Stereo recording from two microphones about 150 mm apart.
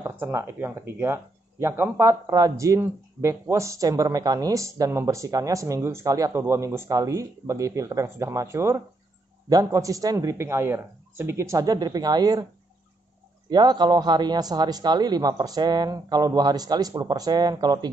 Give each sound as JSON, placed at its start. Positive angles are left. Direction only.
{"t": 0.0, "sound": "speech", "side_deg": -20}
{"t": 13.5, "sound": "speech", "side_deg": -30}